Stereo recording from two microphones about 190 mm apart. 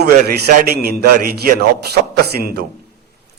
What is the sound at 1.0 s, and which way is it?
A man's voice, 55° right (ahead or behind).